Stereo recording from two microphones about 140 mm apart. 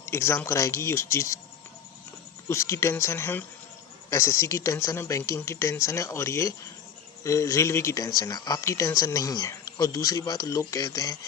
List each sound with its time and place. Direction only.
0.0 s speech: 20° left (ahead or behind)
2.5 s speech: 20° left (ahead or behind)